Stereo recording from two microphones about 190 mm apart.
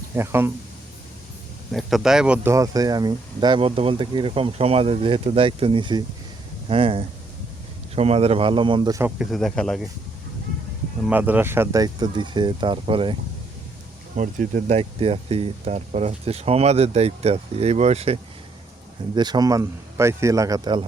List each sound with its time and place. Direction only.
0.2 s a man's voice: 15° right (ahead or behind)
1.7 s speech: centre (ahead or behind)
11.0 s speech: 10° right (ahead or behind); by 13.1 s 25° right (ahead or behind)
14.2 s speech: 40° right (ahead or behind)
19.1 s a man's voice: 20° right (ahead or behind)